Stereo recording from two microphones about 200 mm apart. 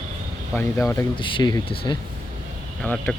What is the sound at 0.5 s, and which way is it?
Speech, 15° left (ahead or behind).